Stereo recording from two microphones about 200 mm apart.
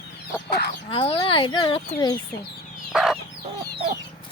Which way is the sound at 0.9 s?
30° left (ahead or behind).